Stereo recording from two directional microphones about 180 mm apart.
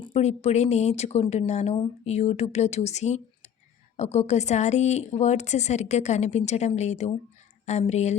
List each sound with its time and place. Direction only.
0.0 s speech: 35° left (ahead or behind)